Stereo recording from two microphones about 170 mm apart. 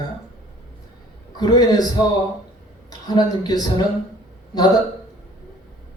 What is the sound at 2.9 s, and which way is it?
Speech, 25° left (ahead or behind).